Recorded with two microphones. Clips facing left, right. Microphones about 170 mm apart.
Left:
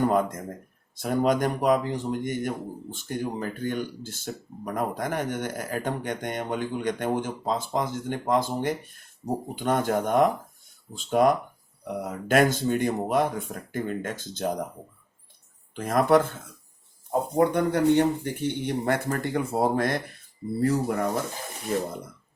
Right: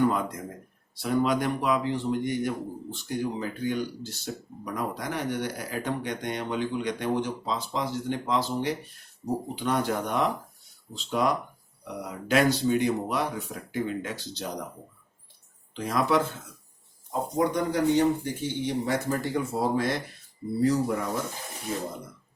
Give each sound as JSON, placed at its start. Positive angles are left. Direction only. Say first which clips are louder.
{"t": 0.0, "sound": "speech", "louder": "left 2 dB", "side_deg": 45}
{"t": 15.7, "sound": "speech", "louder": "left 4 dB", "side_deg": 50}